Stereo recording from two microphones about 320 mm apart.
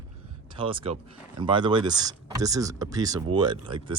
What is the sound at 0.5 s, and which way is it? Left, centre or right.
Speech, centre.